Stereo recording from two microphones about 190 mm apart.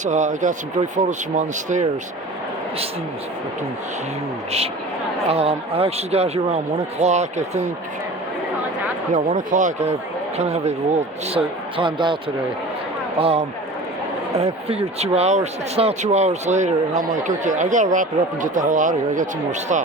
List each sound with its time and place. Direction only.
0.0 s speech: 40° right (ahead or behind)
5.3 s speech: 30° right (ahead or behind)
9.1 s speech: 40° right (ahead or behind); by 12.1 s 25° right (ahead or behind)
13.1 s speech: 30° right (ahead or behind)